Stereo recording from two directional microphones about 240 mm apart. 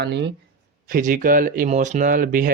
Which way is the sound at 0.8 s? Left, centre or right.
Right.